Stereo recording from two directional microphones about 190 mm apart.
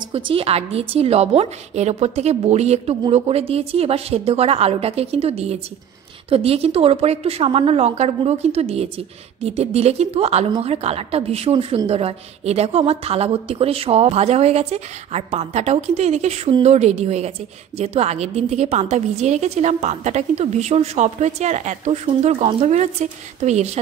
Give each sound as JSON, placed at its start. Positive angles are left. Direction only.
{"t": 0.1, "sound": "a woman's voice", "side_deg": -30}